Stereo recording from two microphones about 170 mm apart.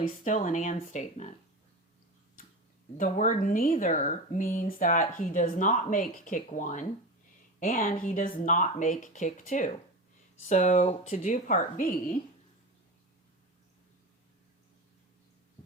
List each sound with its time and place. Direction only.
0.0 s speech: 50° left (ahead or behind)
3.0 s speech: 50° left (ahead or behind)